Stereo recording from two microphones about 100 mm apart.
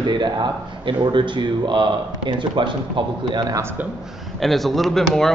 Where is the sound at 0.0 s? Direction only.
50° right (ahead or behind).